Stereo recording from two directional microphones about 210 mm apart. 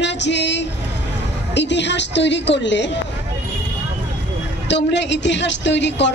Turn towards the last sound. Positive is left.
turn(degrees=55)  # may be behind; listen again after turning